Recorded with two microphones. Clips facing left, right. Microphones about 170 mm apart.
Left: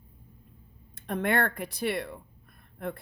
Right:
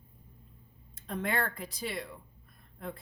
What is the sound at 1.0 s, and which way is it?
A woman's voice, 65° left (ahead or behind).